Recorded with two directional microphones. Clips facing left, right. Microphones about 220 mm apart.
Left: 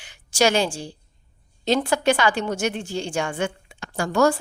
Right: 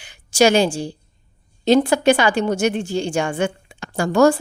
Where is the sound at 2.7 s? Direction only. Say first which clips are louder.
Right 6 dB; 55° right (ahead or behind).